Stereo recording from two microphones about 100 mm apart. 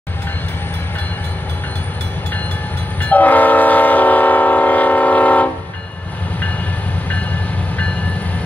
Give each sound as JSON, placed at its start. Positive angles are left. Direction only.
{"t": 3.0, "sound": "train", "side_deg": 15}